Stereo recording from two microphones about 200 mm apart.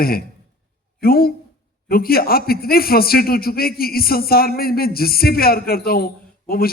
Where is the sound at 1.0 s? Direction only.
50° left (ahead or behind).